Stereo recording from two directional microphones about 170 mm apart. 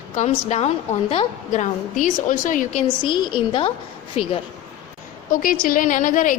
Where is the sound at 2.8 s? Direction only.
30° left (ahead or behind).